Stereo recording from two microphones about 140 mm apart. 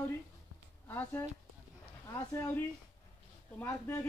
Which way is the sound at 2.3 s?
15° left (ahead or behind).